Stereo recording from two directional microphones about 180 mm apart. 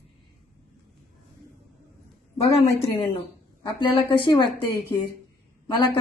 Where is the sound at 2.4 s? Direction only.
35° left (ahead or behind).